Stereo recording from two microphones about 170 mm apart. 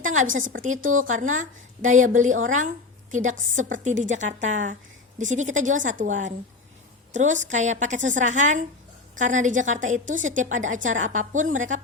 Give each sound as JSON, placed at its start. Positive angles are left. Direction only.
{"t": 0.0, "sound": "a woman's voice", "side_deg": -50}